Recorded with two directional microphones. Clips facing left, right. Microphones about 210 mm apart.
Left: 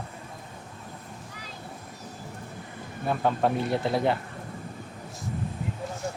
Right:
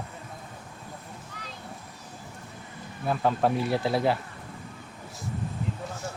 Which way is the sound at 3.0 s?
Centre (ahead or behind).